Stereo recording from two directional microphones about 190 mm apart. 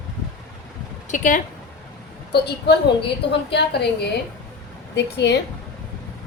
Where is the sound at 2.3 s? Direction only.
60° left (ahead or behind).